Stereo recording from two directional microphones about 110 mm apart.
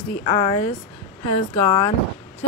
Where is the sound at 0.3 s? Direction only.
40° left (ahead or behind).